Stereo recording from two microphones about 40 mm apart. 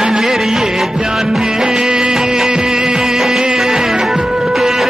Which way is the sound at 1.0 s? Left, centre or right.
Centre.